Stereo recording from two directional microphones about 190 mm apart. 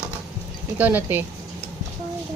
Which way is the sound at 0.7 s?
10° right (ahead or behind).